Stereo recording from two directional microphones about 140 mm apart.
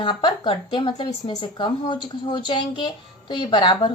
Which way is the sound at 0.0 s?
35° left (ahead or behind).